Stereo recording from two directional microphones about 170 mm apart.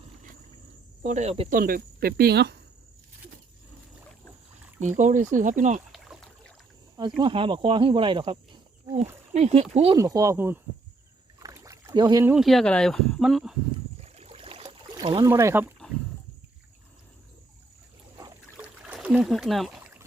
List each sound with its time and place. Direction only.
1.0 s speech: 40° right (ahead or behind)
1.5 s speech: 60° right (ahead or behind); by 2.6 s 75° right (ahead or behind)
4.8 s speech: 45° right (ahead or behind)
5.9 s rowboat: centre (ahead or behind)
7.2 s speech: 30° right (ahead or behind)
9.9 s speech: 20° right (ahead or behind)
11.3 s rowboat: 20° right (ahead or behind)
12.2 s speech: 5° right (ahead or behind)
14.0 s a sound: 40° right (ahead or behind)
15.3 s speech: 15° right (ahead or behind)
18.9 s speech: 5° right (ahead or behind)